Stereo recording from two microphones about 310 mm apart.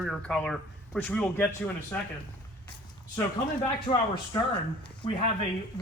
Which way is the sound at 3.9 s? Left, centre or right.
Centre.